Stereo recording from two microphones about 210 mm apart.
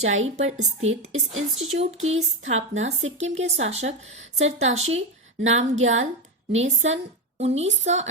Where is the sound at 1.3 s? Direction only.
70° right (ahead or behind).